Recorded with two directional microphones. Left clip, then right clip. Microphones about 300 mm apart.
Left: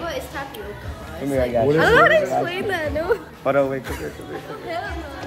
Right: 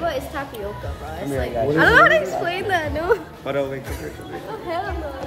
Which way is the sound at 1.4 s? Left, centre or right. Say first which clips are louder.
Even; centre.